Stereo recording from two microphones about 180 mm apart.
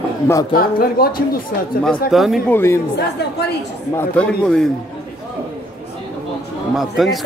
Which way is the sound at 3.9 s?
5° left (ahead or behind).